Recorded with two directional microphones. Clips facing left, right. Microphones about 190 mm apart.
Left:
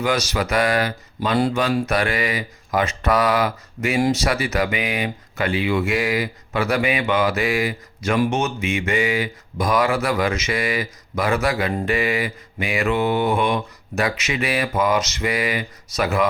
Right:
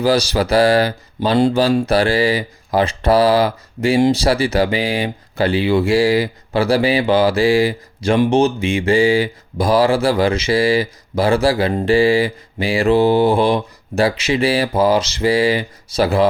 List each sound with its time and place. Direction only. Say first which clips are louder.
0.0 s speech: right 6 dB; 35° right (ahead or behind)